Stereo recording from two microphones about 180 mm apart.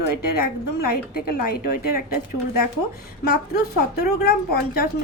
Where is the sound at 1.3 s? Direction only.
55° left (ahead or behind).